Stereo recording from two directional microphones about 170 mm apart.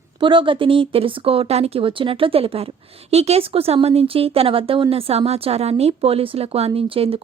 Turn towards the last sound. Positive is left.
turn(degrees=-35)  # may be behind; listen again after turning